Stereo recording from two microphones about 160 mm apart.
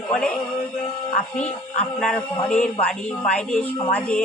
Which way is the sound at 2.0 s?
5° left (ahead or behind).